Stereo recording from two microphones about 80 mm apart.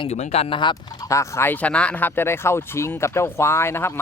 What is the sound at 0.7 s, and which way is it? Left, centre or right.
Speech, left.